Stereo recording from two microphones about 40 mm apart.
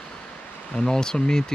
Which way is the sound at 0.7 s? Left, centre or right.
Centre.